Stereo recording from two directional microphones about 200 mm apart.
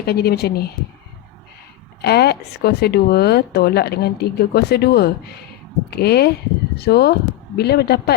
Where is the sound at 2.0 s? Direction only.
55° left (ahead or behind).